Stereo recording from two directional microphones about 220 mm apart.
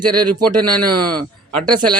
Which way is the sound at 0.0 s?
90° right.